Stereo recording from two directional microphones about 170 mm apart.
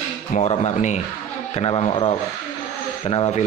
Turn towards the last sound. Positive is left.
turn(degrees=40)  # may be behind; listen again after turning